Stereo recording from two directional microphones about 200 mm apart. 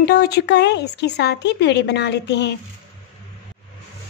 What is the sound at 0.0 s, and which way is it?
Speech, 55° left (ahead or behind).